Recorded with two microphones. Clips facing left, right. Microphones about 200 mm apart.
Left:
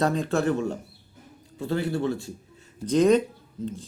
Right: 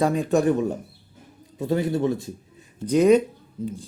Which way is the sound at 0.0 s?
10° right (ahead or behind).